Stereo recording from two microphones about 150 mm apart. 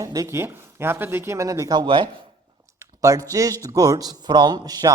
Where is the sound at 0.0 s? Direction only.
25° right (ahead or behind).